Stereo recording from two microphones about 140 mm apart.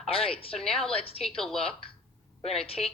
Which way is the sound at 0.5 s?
5° left (ahead or behind).